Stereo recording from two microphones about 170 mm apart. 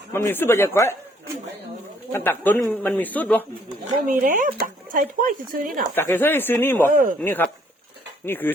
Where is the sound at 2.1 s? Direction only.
10° left (ahead or behind).